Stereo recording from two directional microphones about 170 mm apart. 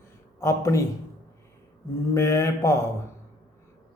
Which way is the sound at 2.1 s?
20° left (ahead or behind).